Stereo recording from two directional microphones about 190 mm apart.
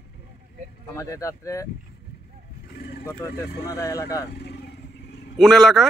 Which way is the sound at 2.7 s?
60° left (ahead or behind).